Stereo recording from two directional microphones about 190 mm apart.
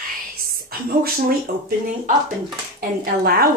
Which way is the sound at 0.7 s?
50° right (ahead or behind).